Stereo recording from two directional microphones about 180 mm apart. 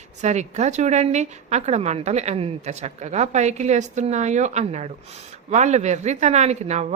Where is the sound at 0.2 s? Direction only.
40° right (ahead or behind).